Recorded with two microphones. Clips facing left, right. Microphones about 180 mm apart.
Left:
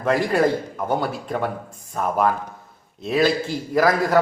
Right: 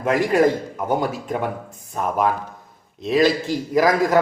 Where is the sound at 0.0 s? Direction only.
5° right (ahead or behind).